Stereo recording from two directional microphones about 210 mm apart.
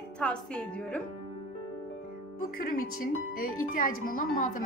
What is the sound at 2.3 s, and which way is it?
Speech, 40° left (ahead or behind).